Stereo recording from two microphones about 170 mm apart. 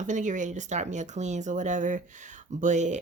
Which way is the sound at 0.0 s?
45° right (ahead or behind).